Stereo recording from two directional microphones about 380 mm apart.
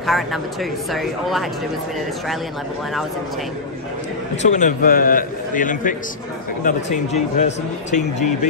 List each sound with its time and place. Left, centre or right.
0.0 s speech: centre
4.4 s a man's voice: centre